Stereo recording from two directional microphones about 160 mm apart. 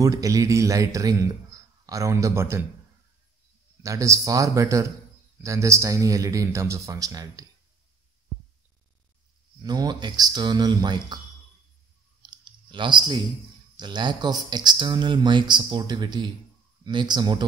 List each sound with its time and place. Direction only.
0.0 s speech: 20° right (ahead or behind)
1.5 s a sound: 20° right (ahead or behind)
1.9 s speech: 20° right (ahead or behind)
3.8 s speech: 20° right (ahead or behind)
9.6 s speech: 25° right (ahead or behind)
12.2 s clicking: 30° right (ahead or behind)
13.7 s speech: 30° right (ahead or behind)